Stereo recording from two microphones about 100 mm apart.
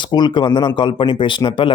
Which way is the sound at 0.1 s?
50° left (ahead or behind).